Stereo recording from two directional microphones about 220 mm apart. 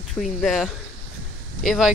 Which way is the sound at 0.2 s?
Centre (ahead or behind).